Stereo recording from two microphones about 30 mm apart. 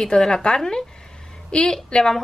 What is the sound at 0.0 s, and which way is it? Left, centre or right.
Speech, left.